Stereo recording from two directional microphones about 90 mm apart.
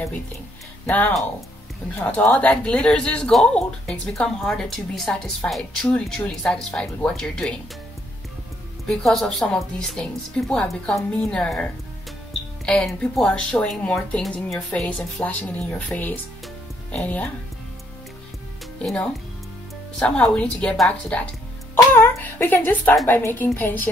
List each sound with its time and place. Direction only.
0.8 s speech: 20° left (ahead or behind)
8.8 s speech: 5° left (ahead or behind)
12.6 s speech: 10° left (ahead or behind)
13.9 s speech: centre (ahead or behind)
14.7 s speech: 15° left (ahead or behind)
18.8 s speech: 10° left (ahead or behind)
21.9 s speech: 25° left (ahead or behind)